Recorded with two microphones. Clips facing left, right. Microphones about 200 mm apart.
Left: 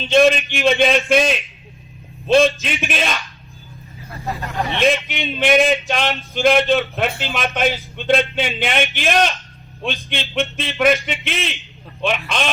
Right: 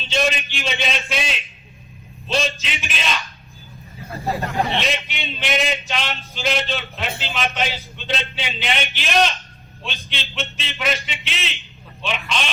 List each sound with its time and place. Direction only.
0.1 s speech: 55° left (ahead or behind)
4.8 s speech: 55° left (ahead or behind)